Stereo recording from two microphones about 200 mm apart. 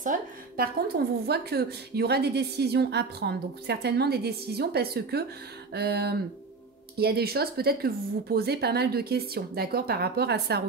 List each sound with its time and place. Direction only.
0.0 s a woman's voice: 45° right (ahead or behind)